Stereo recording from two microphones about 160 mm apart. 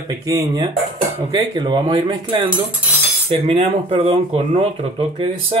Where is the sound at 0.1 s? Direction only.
20° right (ahead or behind).